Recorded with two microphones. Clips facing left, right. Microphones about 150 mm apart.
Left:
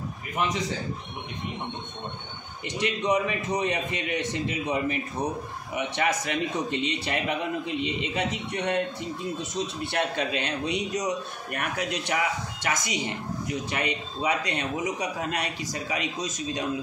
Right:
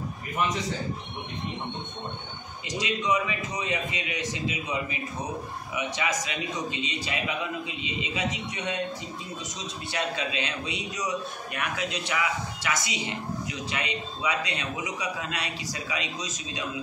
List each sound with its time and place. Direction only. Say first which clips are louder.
2.8 s a man's voice: left 2 dB; 60° left (ahead or behind)